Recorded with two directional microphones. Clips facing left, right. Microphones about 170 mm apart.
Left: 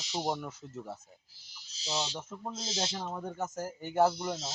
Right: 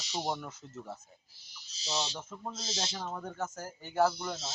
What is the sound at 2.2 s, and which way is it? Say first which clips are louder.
Speech: left 2 dB; 10° left (ahead or behind).